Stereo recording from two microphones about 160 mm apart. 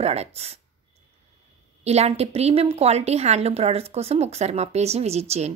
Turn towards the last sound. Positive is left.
turn(degrees=-40)  # may be behind; listen again after turning